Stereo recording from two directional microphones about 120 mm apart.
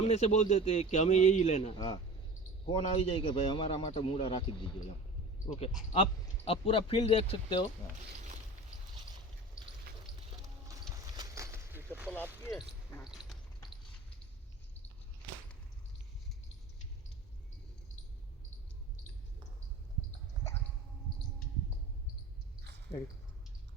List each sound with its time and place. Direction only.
0.0 s a man's voice: 65° left (ahead or behind)
1.7 s a man's voice: 45° left (ahead or behind)
2.7 s a man's voice: 55° left (ahead or behind)
5.5 s a man's voice: 55° left (ahead or behind)
10.7 s vehicle: 30° right (ahead or behind)
13.1 s a sound: 5° right (ahead or behind)